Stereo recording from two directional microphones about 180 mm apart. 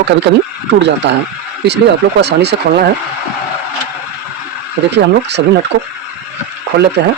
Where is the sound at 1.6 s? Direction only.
70° right (ahead or behind).